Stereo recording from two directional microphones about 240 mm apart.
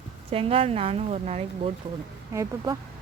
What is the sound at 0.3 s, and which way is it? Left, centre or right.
Speech, right.